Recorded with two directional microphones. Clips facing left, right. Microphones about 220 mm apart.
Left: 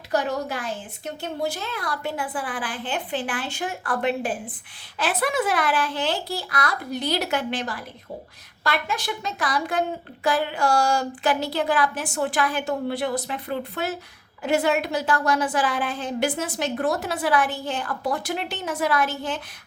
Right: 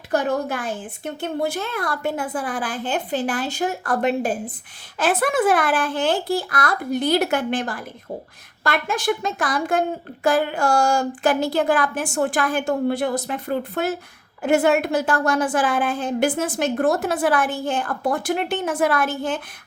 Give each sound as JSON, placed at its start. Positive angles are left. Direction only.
{"t": 0.1, "sound": "a woman's voice", "side_deg": -50}